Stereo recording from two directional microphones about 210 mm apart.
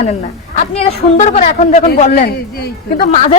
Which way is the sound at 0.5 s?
30° left (ahead or behind).